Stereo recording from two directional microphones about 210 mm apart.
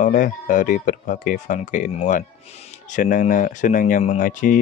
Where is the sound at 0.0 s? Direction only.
40° left (ahead or behind).